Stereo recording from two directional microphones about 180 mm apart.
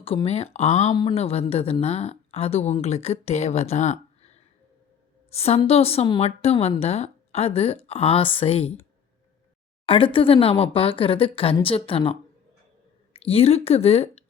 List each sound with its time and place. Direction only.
0.0 s a woman's voice: 30° left (ahead or behind)
9.8 s a woman's voice: 30° left (ahead or behind)
13.1 s a woman's voice: 35° left (ahead or behind)